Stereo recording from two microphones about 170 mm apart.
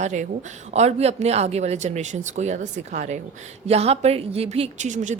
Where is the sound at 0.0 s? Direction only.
45° right (ahead or behind).